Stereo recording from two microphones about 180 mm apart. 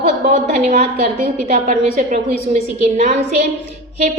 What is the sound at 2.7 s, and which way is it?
Speech, 40° right (ahead or behind).